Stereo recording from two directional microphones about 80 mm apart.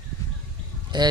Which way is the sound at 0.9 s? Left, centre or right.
Right.